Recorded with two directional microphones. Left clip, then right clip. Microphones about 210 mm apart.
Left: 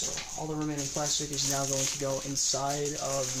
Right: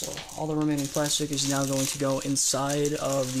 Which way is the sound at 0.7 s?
50° right (ahead or behind).